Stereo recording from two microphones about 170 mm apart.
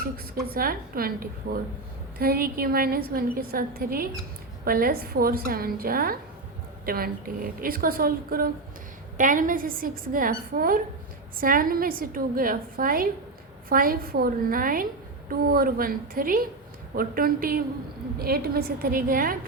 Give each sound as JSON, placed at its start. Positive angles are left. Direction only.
{"t": 0.5, "sound": "a woman's voice", "side_deg": -60}